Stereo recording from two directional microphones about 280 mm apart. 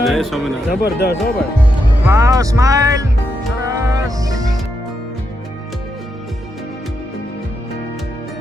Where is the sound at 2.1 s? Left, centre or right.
Centre.